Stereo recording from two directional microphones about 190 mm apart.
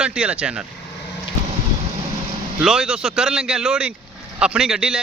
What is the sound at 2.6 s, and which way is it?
Speech, 5° right (ahead or behind).